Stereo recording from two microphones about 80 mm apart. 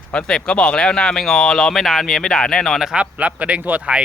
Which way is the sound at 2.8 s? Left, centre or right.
Centre.